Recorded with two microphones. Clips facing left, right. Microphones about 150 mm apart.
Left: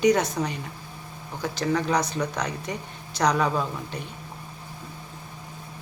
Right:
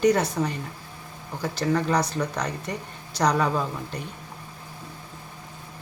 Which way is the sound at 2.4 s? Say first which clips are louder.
Even; 10° left (ahead or behind).